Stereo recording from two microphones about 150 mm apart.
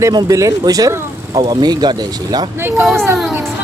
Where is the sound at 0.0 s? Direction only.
25° right (ahead or behind).